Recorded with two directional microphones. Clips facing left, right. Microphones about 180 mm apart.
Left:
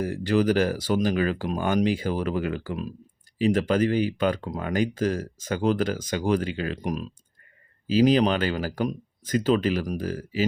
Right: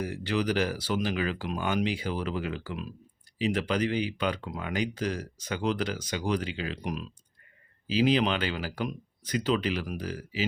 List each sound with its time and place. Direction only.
0.0 s speech: 45° left (ahead or behind)